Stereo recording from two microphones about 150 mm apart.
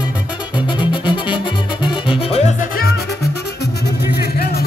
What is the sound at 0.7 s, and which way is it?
Music, 30° left (ahead or behind).